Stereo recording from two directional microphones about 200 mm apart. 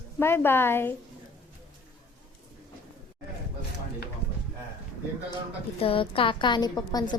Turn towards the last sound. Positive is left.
turn(degrees=20)  # may be behind; listen again after turning